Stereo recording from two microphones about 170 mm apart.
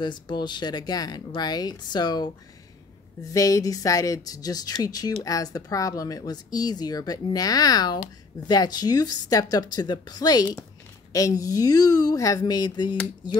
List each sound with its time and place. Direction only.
0.0 s speech: 25° left (ahead or behind)
3.3 s speech: 20° left (ahead or behind)